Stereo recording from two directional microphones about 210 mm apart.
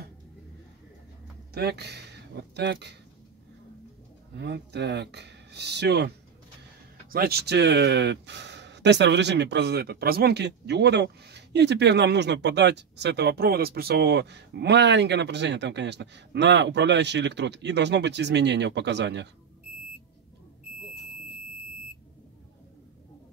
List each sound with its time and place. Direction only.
1.5 s speech: 50° right (ahead or behind)
4.4 s speech: 50° right (ahead or behind)